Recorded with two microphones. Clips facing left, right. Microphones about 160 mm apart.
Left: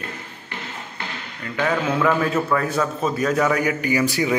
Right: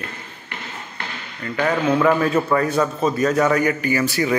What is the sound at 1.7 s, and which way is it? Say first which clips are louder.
A man's voice: right 3 dB; 5° left (ahead or behind).